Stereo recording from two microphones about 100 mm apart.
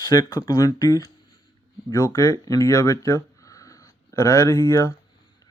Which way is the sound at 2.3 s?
35° left (ahead or behind).